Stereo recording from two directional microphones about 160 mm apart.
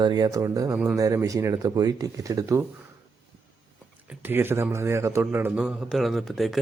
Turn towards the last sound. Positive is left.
turn(degrees=0)  # may be behind; listen again after turning